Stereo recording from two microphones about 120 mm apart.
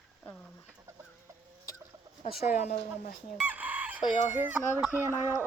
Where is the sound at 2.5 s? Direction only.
85° left.